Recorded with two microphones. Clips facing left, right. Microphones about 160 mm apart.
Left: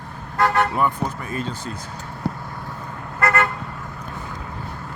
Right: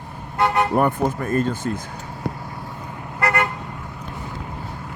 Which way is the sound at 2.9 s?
15° right (ahead or behind).